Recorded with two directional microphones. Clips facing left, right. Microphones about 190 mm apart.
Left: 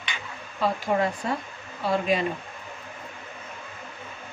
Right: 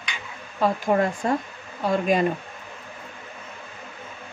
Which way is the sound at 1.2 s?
50° right (ahead or behind).